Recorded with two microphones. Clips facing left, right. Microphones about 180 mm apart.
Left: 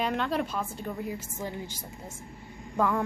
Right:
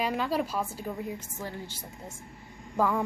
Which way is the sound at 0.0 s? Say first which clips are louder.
Even; 5° right (ahead or behind).